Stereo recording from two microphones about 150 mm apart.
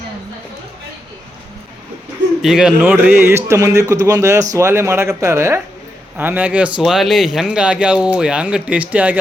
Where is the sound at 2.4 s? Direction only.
5° right (ahead or behind).